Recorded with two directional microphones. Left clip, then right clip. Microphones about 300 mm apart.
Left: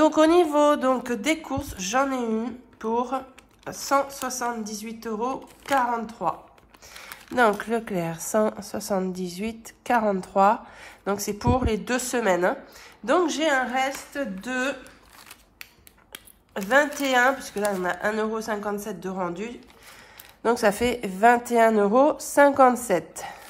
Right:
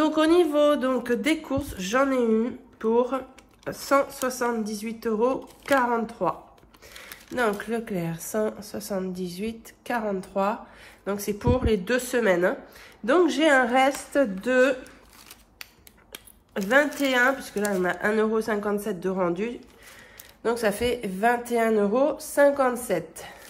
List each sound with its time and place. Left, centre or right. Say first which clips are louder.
0.0 s a woman's voice: left 2 dB; centre
16.1 s speech: even; centre
20.4 s speech: left 3 dB; centre